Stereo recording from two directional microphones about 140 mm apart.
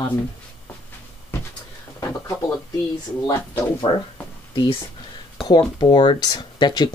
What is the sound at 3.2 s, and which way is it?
Speech, 15° left (ahead or behind).